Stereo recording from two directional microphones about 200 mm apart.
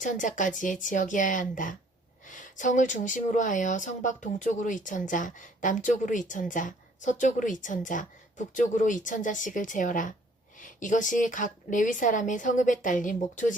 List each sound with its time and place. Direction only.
0.0 s speech: 40° left (ahead or behind)